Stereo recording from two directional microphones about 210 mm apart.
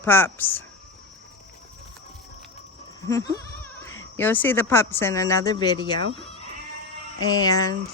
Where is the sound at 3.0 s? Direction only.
15° left (ahead or behind).